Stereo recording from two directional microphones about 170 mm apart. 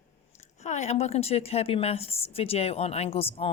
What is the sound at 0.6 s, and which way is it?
A woman's voice, 40° left (ahead or behind).